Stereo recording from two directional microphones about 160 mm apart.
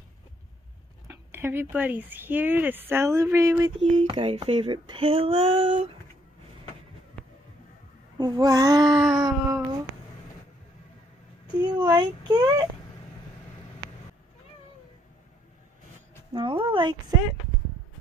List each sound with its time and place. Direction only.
1.0 s speech: 15° right (ahead or behind)
3.9 s female singing: 35° right (ahead or behind)
7.2 s music: 10° left (ahead or behind)
8.2 s speech: 25° right (ahead or behind)
11.6 s speech: 25° right (ahead or behind)
16.3 s female singing: 35° right (ahead or behind)